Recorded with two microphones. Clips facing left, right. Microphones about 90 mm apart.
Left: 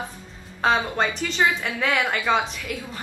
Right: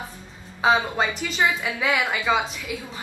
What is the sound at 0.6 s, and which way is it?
A woman's voice, 5° right (ahead or behind).